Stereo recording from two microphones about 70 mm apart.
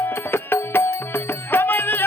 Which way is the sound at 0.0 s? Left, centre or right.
Left.